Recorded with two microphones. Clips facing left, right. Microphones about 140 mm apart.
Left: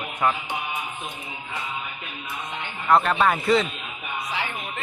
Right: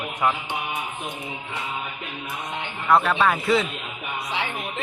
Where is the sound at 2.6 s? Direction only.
Centre (ahead or behind).